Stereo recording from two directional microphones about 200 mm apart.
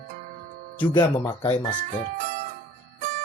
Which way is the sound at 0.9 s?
15° left (ahead or behind).